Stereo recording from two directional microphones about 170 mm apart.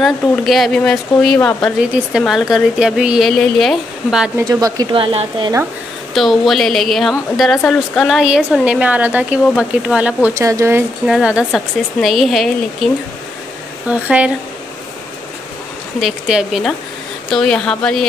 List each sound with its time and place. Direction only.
0.0 s speech: centre (ahead or behind)
4.4 s speech: 20° right (ahead or behind)
6.1 s speech: centre (ahead or behind)
10.3 s speech: 15° right (ahead or behind)
11.1 s speech: 5° right (ahead or behind)
16.0 s speech: 5° right (ahead or behind)